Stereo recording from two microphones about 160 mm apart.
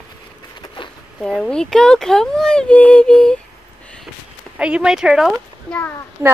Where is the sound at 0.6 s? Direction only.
30° left (ahead or behind).